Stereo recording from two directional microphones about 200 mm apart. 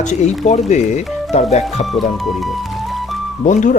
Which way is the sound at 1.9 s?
Centre (ahead or behind).